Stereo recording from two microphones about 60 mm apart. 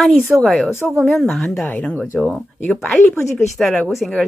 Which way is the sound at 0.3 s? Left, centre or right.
Centre.